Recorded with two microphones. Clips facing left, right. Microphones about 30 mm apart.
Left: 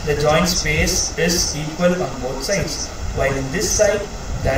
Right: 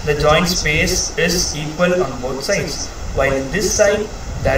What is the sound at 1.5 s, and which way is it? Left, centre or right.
Speech, centre.